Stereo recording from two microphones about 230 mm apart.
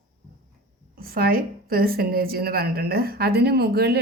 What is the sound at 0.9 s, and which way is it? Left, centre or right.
A woman's voice, right.